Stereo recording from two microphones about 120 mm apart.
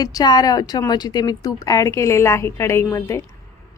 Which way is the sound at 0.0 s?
35° left (ahead or behind).